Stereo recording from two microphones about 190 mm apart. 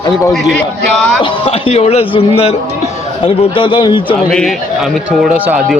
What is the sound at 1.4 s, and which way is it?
A man's voice, 30° left (ahead or behind).